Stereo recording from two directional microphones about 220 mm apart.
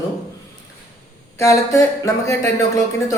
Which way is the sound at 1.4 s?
15° left (ahead or behind).